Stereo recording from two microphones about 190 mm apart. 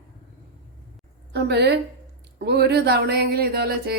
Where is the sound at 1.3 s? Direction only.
60° right (ahead or behind).